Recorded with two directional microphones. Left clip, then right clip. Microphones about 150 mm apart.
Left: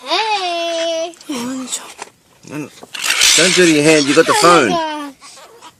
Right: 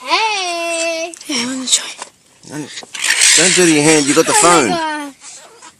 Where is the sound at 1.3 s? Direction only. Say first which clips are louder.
Right 6 dB; centre (ahead or behind).